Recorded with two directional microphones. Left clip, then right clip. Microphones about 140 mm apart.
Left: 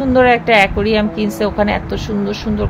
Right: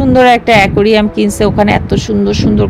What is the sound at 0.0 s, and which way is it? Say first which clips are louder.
A woman's voice: right 4 dB; 50° right (ahead or behind).